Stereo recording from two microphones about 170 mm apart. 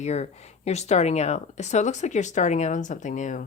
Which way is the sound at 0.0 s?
40° left (ahead or behind).